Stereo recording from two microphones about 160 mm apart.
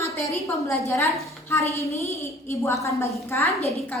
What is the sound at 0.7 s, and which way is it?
A woman's voice, 15° left (ahead or behind).